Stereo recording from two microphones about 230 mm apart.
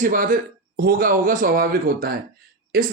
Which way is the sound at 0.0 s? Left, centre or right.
Right.